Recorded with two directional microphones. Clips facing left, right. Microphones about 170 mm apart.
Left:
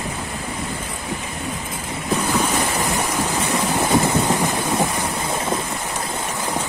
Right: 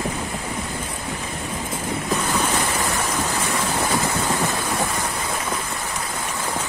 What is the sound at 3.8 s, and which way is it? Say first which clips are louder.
Thunder: left 7 dB; 20° left (ahead or behind).